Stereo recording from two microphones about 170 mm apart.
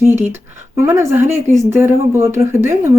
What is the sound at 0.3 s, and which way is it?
Speech, 15° right (ahead or behind).